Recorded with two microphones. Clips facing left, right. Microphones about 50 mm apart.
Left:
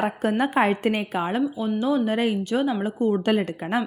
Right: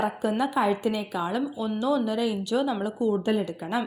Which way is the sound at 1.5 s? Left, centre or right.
Left.